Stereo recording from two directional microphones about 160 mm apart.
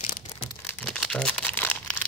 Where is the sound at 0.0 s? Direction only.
50° left (ahead or behind).